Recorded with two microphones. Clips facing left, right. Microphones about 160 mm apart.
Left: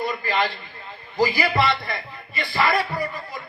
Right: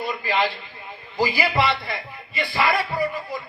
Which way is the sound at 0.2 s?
15° right (ahead or behind).